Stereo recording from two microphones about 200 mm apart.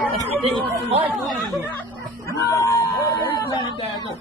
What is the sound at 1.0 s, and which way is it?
Speech, 10° right (ahead or behind).